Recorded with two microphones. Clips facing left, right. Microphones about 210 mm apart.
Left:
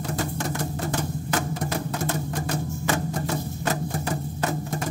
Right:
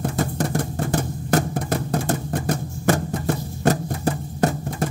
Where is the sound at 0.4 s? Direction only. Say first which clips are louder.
Right 5 dB; 40° right (ahead or behind).